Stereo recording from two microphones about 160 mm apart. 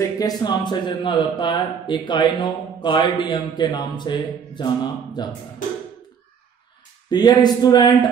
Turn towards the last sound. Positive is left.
turn(degrees=25)  # may be behind; listen again after turning